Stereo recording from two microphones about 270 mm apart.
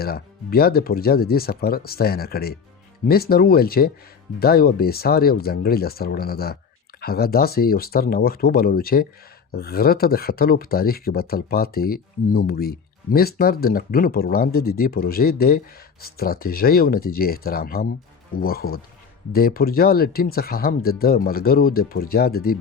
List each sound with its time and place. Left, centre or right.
0.0 s speech: left